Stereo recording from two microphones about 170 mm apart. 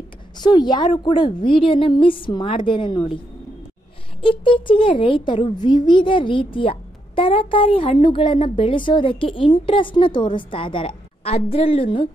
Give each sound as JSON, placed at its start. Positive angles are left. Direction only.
{"t": 0.4, "sound": "a child's voice", "side_deg": 25}
{"t": 4.2, "sound": "a child's voice", "side_deg": 30}